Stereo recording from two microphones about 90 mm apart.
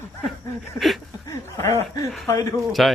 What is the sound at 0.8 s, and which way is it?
Speech, centre (ahead or behind).